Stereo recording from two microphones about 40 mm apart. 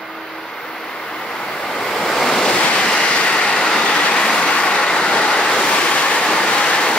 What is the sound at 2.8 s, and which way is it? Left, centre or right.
Vehicle, left.